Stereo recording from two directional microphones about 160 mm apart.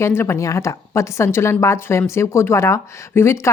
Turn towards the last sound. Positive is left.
turn(degrees=15)  # may be behind; listen again after turning